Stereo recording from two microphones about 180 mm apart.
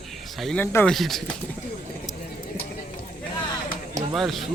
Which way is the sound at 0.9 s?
Centre (ahead or behind).